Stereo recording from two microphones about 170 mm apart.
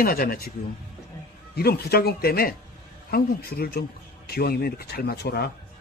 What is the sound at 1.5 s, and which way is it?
Speech, 65° left (ahead or behind).